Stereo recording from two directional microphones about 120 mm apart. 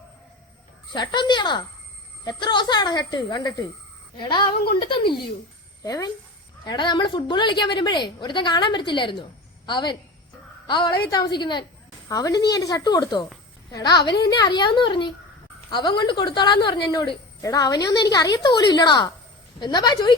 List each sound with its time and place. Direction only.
0.9 s a woman's voice: 40° left (ahead or behind)
5.8 s a woman's voice: 30° left (ahead or behind)